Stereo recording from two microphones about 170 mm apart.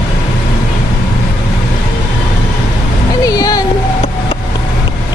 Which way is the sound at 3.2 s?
20° left (ahead or behind).